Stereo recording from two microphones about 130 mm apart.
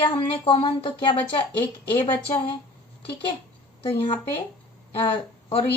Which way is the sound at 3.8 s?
40° left (ahead or behind).